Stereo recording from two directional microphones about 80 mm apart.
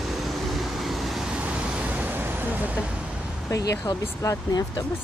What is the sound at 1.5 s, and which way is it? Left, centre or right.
Vehicle, centre.